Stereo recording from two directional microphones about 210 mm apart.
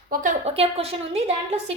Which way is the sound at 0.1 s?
40° right (ahead or behind).